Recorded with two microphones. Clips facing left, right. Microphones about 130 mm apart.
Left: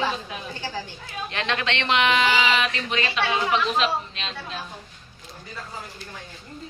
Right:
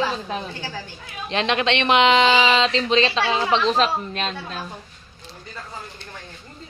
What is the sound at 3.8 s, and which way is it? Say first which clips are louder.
Speech: right 3 dB; 45° right (ahead or behind).